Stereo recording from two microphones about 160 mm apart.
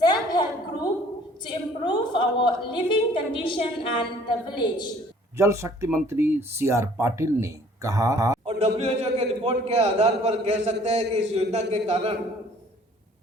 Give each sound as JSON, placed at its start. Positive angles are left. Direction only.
{"t": 0.0, "sound": "a sound", "side_deg": 25}
{"t": 1.5, "sound": "a woman's voice", "side_deg": 30}
{"t": 5.4, "sound": "speech", "side_deg": -20}
{"t": 8.4, "sound": "a man's voice", "side_deg": -40}